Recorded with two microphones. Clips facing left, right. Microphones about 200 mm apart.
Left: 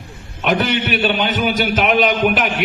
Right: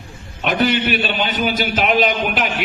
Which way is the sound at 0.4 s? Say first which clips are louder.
Even; 55° left (ahead or behind).